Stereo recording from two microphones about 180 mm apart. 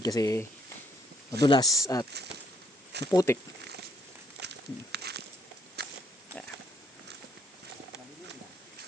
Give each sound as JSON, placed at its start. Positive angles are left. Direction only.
{"t": 0.0, "sound": "speech", "side_deg": 20}
{"t": 3.1, "sound": "speech", "side_deg": 20}
{"t": 4.4, "sound": "a sound", "side_deg": -65}
{"t": 5.8, "sound": "pig", "side_deg": -65}